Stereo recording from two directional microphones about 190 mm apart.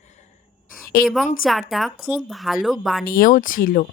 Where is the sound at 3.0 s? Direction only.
45° left (ahead or behind).